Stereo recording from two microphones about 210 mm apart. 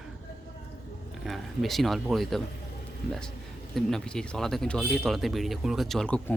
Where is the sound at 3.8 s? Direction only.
Centre (ahead or behind).